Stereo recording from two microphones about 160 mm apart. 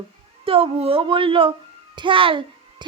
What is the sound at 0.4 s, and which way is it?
A child's voice, 35° right (ahead or behind).